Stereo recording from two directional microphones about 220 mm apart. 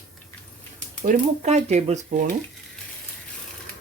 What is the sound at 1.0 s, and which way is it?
Speech, 35° right (ahead or behind).